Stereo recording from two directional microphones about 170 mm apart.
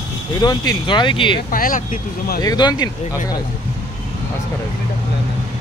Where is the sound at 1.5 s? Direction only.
55° left (ahead or behind).